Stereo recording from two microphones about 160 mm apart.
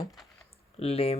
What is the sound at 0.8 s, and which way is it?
Speech, 40° left (ahead or behind).